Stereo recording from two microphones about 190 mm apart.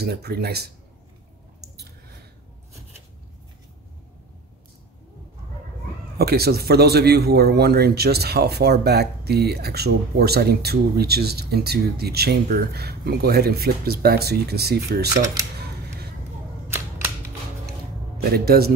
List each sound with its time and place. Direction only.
0.0 s a man's voice: 55° right (ahead or behind)
6.1 s a man's voice: 55° right (ahead or behind)
18.1 s a man's voice: 55° right (ahead or behind)